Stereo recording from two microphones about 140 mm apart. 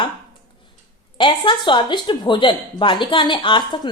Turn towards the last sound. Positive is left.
turn(degrees=35)  # may be behind; listen again after turning